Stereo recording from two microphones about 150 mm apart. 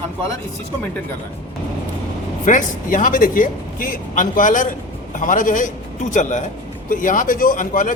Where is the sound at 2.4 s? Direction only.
60° left (ahead or behind).